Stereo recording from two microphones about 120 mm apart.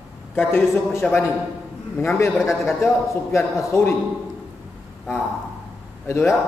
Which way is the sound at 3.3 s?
25° left (ahead or behind).